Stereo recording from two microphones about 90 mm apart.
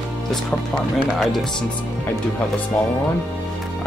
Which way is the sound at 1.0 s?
5° right (ahead or behind).